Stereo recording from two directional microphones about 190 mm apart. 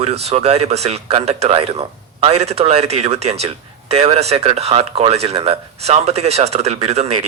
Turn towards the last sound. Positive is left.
turn(degrees=-35)  # may be behind; listen again after turning